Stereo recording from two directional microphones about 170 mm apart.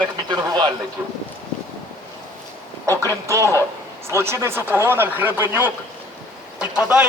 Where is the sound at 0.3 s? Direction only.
25° right (ahead or behind).